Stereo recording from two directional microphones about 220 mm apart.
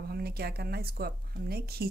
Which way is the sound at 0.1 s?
45° right (ahead or behind).